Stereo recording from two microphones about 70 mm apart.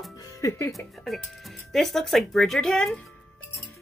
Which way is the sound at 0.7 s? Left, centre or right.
Centre.